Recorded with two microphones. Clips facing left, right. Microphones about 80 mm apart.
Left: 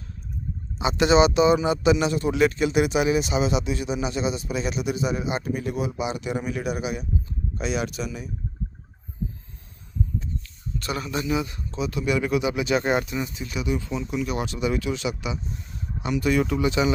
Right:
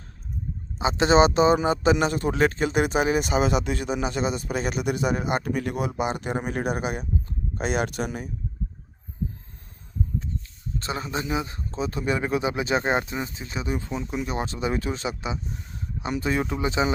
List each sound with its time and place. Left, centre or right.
0.8 s a man's voice: right
10.8 s speech: right